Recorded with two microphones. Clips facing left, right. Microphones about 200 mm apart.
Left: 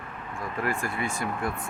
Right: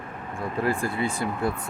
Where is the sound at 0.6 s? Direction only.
30° right (ahead or behind).